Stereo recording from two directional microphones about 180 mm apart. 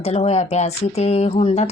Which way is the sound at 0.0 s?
35° left (ahead or behind).